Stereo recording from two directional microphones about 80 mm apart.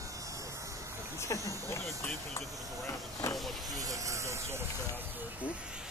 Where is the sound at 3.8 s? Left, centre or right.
Right.